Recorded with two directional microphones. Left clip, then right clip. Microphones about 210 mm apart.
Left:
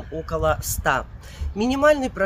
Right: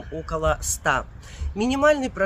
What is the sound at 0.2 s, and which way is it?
Speech, 5° right (ahead or behind).